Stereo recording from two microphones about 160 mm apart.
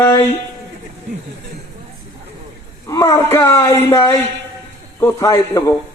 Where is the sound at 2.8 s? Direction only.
20° left (ahead or behind).